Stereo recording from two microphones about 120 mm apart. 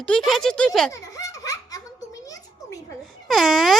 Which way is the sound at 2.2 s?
30° left (ahead or behind).